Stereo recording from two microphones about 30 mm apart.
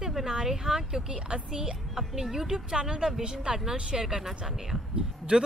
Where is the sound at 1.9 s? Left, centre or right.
Centre.